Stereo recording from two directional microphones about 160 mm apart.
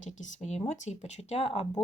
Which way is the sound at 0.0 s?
45° left (ahead or behind).